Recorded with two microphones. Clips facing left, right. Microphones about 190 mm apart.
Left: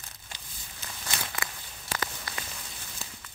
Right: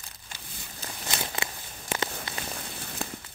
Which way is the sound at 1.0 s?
25° right (ahead or behind).